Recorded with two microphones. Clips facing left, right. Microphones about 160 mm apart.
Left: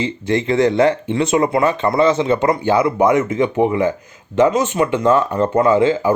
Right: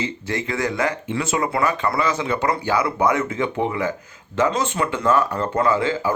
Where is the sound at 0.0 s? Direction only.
20° left (ahead or behind).